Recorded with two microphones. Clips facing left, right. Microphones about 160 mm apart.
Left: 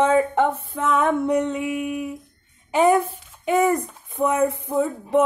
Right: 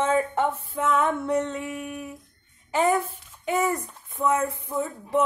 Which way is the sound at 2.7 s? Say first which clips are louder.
Left 5 dB; 15° left (ahead or behind).